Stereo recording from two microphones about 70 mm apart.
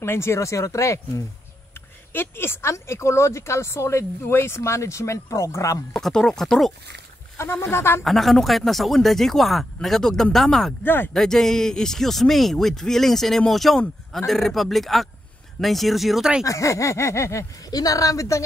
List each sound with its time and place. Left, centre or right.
0.0 s speech: left
1.7 s speech: left
5.9 s speech: centre
7.4 s speech: left
8.0 s a man's voice: centre
10.8 s speech: left
11.1 s a man's voice: centre
16.4 s speech: left
17.6 s speech: left